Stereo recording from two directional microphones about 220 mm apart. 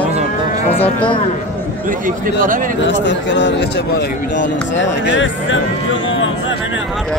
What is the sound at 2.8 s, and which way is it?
Speech, 55° left (ahead or behind).